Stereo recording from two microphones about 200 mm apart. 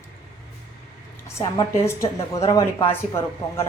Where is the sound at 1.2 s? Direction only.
15° left (ahead or behind).